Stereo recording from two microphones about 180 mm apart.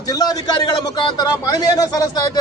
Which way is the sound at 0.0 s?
20° left (ahead or behind).